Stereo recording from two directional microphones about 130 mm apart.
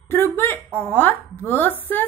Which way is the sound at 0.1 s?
20° left (ahead or behind).